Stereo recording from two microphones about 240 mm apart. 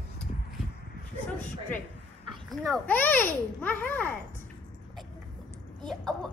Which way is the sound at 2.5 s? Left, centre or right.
Centre.